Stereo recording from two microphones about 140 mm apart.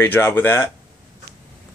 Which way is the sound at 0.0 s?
15° left (ahead or behind).